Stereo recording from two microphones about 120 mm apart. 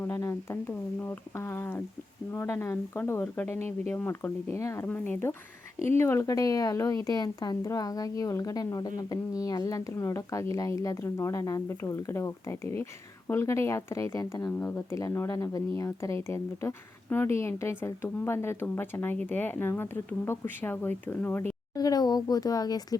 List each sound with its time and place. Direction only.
0.0 s speech: 25° left (ahead or behind)
6.0 s a woman's voice: 25° left (ahead or behind)
14.5 s speech: 15° left (ahead or behind)
21.8 s a woman's voice: 35° left (ahead or behind)